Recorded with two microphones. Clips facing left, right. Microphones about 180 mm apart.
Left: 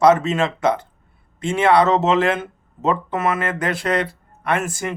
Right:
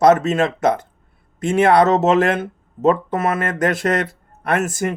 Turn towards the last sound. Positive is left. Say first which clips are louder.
# right 3 dB
turn(degrees=-45)  # may be behind; listen again after turning